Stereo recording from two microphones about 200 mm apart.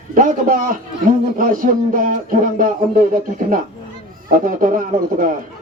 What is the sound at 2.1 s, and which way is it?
Speech, 45° right (ahead or behind).